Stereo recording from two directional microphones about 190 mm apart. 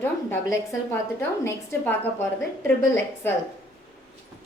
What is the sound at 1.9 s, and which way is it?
Speech, 10° left (ahead or behind).